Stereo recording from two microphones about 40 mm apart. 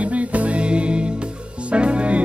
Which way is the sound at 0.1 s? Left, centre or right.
Right.